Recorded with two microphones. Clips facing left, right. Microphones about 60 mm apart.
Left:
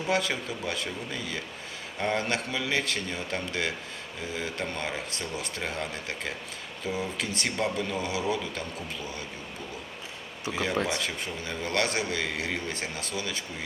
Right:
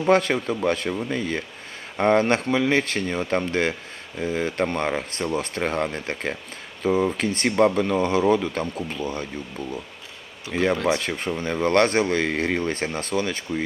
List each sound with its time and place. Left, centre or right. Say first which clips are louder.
0.0 s a man's voice: right 9 dB; right
10.5 s a man's voice: right 7 dB; right